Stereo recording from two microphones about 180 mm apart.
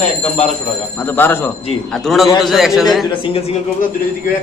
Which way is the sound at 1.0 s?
10° left (ahead or behind).